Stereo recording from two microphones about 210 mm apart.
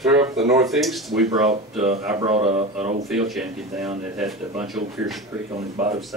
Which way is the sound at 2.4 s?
30° right (ahead or behind).